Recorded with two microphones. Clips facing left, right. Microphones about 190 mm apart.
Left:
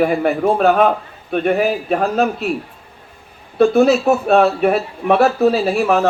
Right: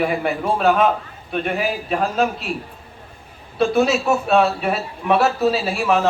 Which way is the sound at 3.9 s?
55° left (ahead or behind).